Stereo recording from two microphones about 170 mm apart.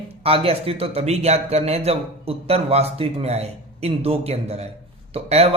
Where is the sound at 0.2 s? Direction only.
35° right (ahead or behind).